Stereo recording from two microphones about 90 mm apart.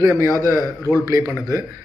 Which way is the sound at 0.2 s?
40° right (ahead or behind).